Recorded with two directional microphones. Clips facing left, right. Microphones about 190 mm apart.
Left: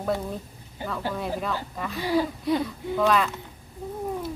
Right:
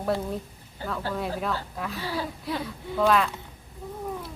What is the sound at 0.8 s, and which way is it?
Speech, 15° left (ahead or behind).